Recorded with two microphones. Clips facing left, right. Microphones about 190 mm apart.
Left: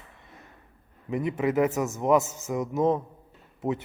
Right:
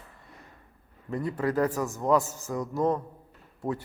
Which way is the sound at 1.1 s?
20° left (ahead or behind).